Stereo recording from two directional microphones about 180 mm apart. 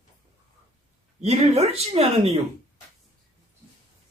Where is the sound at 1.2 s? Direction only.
35° right (ahead or behind).